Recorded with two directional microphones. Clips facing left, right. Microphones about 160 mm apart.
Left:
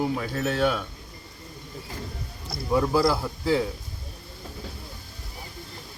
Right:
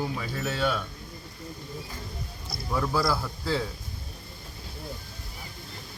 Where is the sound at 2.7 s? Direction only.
15° left (ahead or behind).